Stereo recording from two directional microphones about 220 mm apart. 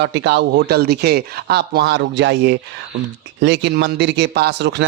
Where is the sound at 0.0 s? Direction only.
55° right (ahead or behind).